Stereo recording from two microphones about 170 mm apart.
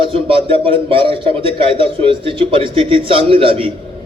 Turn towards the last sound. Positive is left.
turn(degrees=-35)  # may be behind; listen again after turning